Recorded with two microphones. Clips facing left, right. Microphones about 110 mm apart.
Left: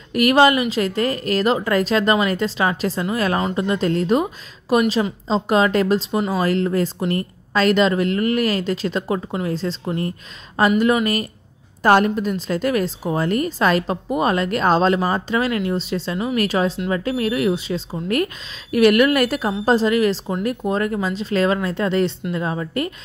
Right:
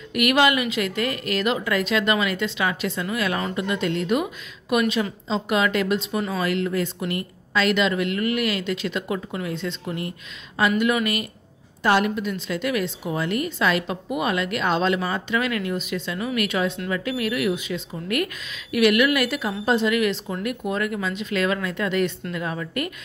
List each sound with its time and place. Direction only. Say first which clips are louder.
0.1 s a woman's voice: left 5 dB; 35° left (ahead or behind)